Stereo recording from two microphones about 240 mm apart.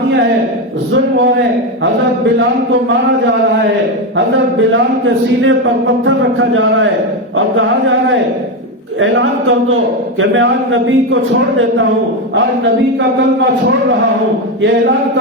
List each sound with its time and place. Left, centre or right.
4.5 s a man's voice: right
9.0 s a man's voice: right